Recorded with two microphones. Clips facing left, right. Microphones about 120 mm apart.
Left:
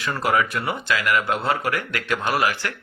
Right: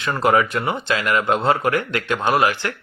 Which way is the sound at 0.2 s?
25° right (ahead or behind).